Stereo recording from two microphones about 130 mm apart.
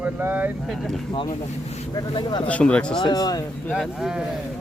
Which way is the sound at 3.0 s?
30° left (ahead or behind).